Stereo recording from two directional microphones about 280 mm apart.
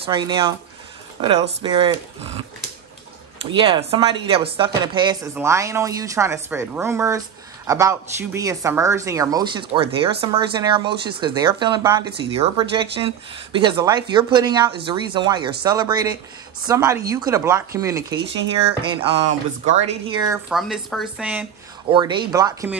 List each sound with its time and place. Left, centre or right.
0.0 s speech: centre
1.6 s speech: centre
3.5 s speech: centre
20.4 s speech: centre
21.9 s speech: centre